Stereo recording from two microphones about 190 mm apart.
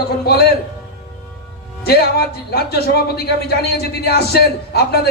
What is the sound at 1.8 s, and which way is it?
A man's voice, 55° left (ahead or behind).